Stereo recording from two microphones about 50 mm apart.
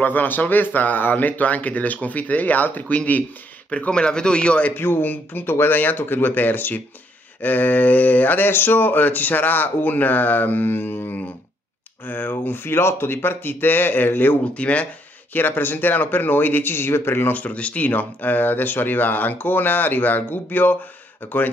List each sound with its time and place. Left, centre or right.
0.0 s speech: left
3.7 s speech: centre
4.7 s speech: left
14.5 s speech: left
15.3 s speech: left